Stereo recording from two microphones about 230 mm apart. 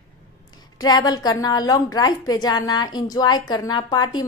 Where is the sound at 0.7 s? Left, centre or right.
Centre.